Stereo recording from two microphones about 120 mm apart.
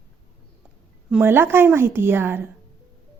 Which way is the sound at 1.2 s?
20° right (ahead or behind).